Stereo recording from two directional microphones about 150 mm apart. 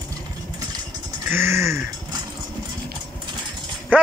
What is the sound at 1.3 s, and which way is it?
Speech, 15° right (ahead or behind).